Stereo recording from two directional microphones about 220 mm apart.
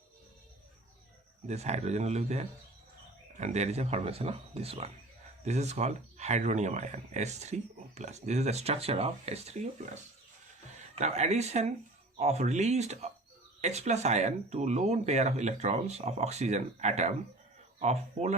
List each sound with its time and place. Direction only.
1.5 s speech: 30° right (ahead or behind)